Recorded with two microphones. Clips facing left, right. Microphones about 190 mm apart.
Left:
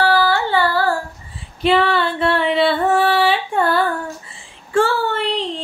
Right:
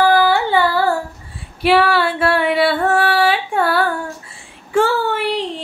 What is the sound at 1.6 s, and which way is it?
Female singing, 5° right (ahead or behind).